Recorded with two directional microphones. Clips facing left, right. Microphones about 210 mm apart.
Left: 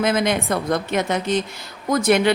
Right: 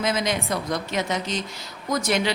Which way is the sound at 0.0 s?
55° left (ahead or behind).